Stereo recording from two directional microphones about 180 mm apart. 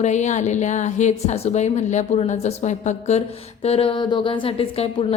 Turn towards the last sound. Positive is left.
turn(degrees=30)  # may be behind; listen again after turning